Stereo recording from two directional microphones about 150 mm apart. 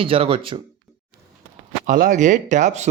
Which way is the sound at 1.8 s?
65° right (ahead or behind).